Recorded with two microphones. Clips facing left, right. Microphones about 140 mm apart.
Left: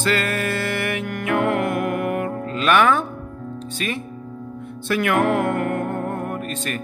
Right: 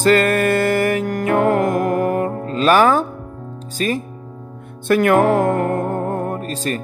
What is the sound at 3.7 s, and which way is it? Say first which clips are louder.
Speech: right 7 dB; 40° right (ahead or behind).